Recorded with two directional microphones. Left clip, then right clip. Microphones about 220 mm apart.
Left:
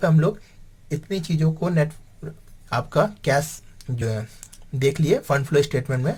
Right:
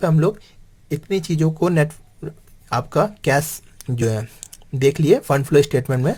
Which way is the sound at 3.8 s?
35° right (ahead or behind).